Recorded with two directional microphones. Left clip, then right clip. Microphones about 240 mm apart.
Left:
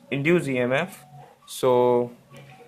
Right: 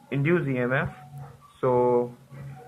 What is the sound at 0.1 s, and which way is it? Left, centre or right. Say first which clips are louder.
Speech: left 3 dB; left.